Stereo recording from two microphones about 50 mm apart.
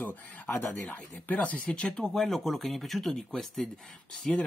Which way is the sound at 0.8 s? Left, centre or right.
Left.